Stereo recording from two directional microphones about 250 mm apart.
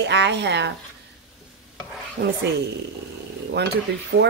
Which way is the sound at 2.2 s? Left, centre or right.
Right.